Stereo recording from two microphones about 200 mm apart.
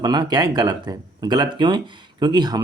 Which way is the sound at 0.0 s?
20° right (ahead or behind).